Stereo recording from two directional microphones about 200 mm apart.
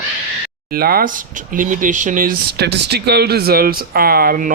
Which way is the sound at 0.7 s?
50° right (ahead or behind).